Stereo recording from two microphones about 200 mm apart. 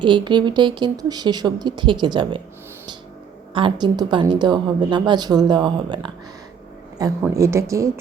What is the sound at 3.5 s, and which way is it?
Speech, 25° right (ahead or behind).